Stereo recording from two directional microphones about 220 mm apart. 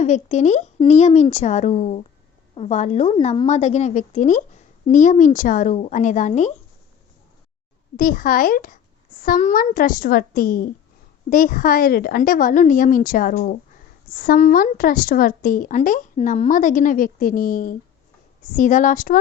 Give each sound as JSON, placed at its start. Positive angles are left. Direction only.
{"t": 0.0, "sound": "a woman's voice", "side_deg": 30}
{"t": 7.9, "sound": "a woman's voice", "side_deg": 40}